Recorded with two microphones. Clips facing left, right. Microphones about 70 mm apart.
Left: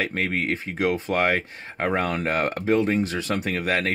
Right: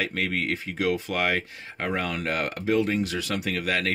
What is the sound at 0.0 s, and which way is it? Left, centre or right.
Speech, left.